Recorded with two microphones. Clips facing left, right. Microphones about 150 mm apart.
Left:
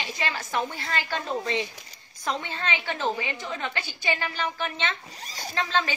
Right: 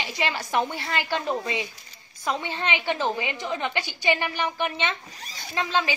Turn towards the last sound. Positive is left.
turn(degrees=-10)  # may be behind; listen again after turning